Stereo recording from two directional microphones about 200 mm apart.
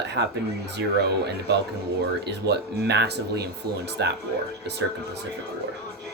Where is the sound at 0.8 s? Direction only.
55° right (ahead or behind).